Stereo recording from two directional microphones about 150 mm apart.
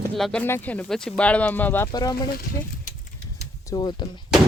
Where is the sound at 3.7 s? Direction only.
30° left (ahead or behind).